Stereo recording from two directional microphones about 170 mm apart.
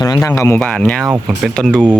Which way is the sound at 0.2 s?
15° left (ahead or behind).